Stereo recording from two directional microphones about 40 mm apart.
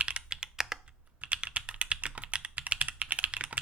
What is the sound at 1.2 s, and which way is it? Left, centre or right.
Computer keyboard, right.